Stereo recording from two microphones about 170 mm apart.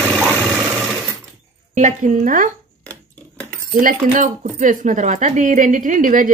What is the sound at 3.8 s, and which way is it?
Speech, 55° right (ahead or behind).